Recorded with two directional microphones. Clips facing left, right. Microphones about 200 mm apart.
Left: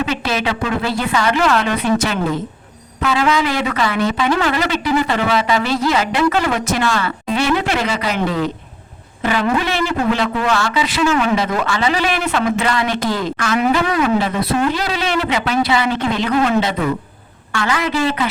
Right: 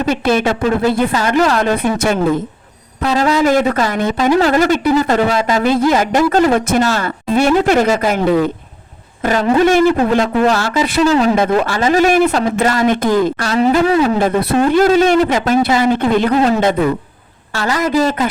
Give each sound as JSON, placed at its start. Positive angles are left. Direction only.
{"t": 0.0, "sound": "speech", "side_deg": -50}
{"t": 3.0, "sound": "speech", "side_deg": -40}
{"t": 9.2, "sound": "speech", "side_deg": -40}
{"t": 11.0, "sound": "speech", "side_deg": -35}
{"t": 13.4, "sound": "speech", "side_deg": -35}
{"t": 14.2, "sound": "speech", "side_deg": -45}
{"t": 17.5, "sound": "speech", "side_deg": -40}